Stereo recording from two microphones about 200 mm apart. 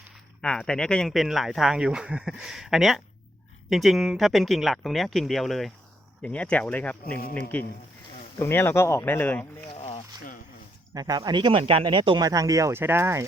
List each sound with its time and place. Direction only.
0.4 s speech: 5° left (ahead or behind)
9.7 s a sound: 30° left (ahead or behind)
10.9 s speech: 20° right (ahead or behind)